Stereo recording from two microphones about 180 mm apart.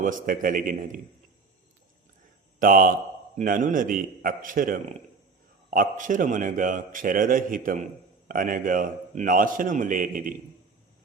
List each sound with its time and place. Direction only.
0.0 s a man's voice: 50° right (ahead or behind)
2.6 s a man's voice: 50° right (ahead or behind)